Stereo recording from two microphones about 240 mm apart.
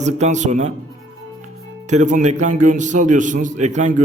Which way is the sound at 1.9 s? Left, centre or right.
Right.